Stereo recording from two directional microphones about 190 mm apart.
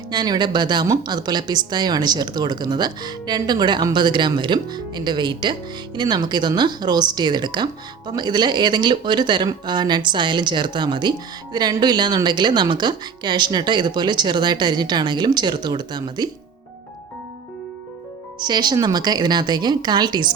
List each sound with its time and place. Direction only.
0.1 s speech: 20° right (ahead or behind)
18.3 s speech: 20° right (ahead or behind)